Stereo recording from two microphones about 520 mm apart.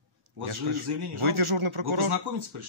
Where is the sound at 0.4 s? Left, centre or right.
Right.